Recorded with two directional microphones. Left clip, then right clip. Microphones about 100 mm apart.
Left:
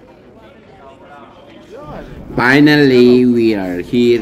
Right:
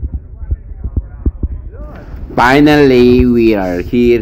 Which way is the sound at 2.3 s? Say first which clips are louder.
Right 2 dB; 30° right (ahead or behind).